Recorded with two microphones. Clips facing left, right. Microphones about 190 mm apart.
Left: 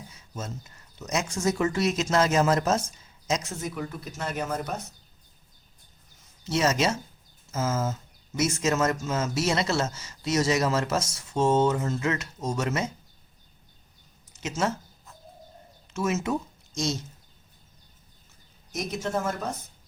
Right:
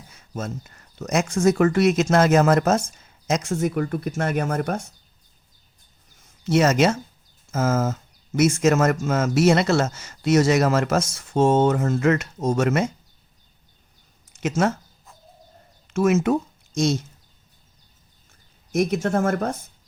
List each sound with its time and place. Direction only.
0.1 s speech: 55° right (ahead or behind)
6.4 s speech: 55° right (ahead or behind)
14.4 s speech: 55° right (ahead or behind)
15.9 s speech: 55° right (ahead or behind)
18.7 s speech: 55° right (ahead or behind)